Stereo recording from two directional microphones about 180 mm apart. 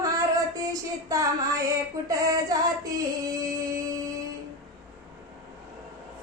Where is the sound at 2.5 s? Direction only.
20° right (ahead or behind).